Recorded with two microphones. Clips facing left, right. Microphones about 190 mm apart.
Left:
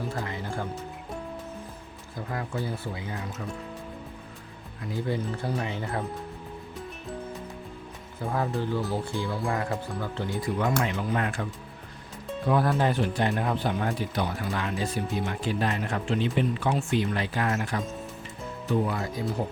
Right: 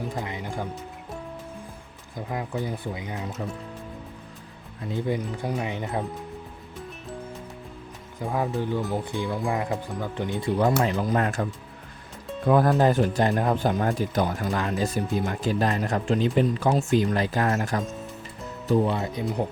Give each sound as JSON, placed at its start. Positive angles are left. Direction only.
{"t": 0.0, "sound": "music", "side_deg": -15}
{"t": 2.1, "sound": "speech", "side_deg": -15}
{"t": 4.9, "sound": "speech", "side_deg": -15}
{"t": 8.2, "sound": "speech", "side_deg": -15}
{"t": 10.6, "sound": "speech", "side_deg": -35}
{"t": 12.5, "sound": "speech", "side_deg": -45}
{"t": 18.7, "sound": "speech", "side_deg": -25}